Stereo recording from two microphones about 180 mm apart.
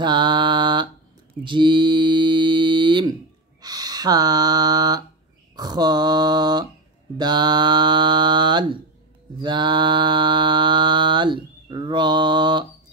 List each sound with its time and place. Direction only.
0.0 s mantra: 25° right (ahead or behind)
3.6 s a sound: 20° right (ahead or behind)
7.2 s mantra: 25° right (ahead or behind)